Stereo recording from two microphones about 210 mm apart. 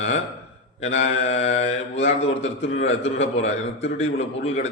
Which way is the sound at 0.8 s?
30° left (ahead or behind).